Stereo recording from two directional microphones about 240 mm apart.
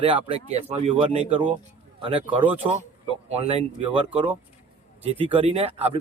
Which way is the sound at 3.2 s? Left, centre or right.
Right.